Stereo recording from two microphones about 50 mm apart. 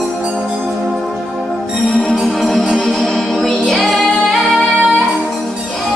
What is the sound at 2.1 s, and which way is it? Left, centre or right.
Music, centre.